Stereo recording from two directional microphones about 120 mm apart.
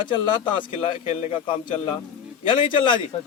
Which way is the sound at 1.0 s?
65° left (ahead or behind).